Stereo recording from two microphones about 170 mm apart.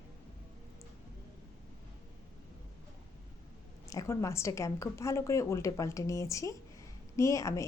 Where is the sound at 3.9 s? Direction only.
20° left (ahead or behind).